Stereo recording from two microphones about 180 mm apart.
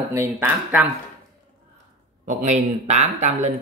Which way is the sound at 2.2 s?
40° right (ahead or behind).